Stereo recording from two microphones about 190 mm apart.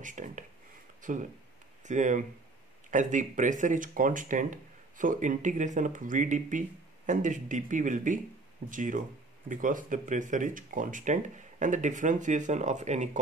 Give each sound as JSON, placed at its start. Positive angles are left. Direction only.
{"t": 0.0, "sound": "speech", "side_deg": -40}